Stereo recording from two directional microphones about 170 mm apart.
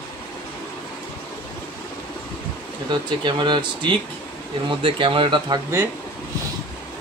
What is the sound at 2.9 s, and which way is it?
Speech, 25° right (ahead or behind).